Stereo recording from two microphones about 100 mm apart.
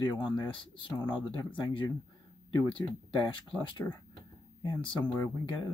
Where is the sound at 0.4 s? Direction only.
55° left (ahead or behind).